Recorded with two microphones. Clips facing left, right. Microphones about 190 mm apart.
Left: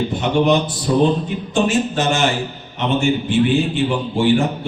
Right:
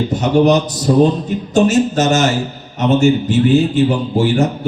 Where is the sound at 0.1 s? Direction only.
40° right (ahead or behind).